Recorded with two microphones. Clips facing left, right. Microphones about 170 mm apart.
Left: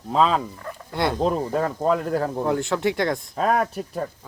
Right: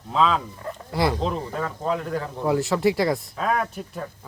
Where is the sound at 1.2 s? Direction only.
45° left (ahead or behind).